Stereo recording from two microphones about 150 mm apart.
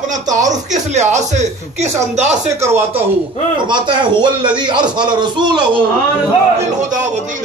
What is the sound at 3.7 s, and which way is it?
Speech, 30° right (ahead or behind).